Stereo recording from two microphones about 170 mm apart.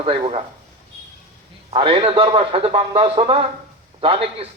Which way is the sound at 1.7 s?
30° right (ahead or behind).